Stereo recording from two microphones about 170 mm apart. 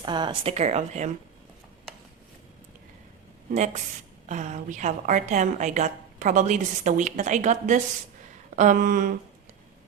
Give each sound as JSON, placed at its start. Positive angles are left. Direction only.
{"t": 0.0, "sound": "speech", "side_deg": -25}
{"t": 4.3, "sound": "a woman's voice", "side_deg": -45}